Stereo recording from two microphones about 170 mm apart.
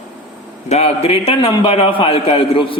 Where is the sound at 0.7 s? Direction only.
35° left (ahead or behind).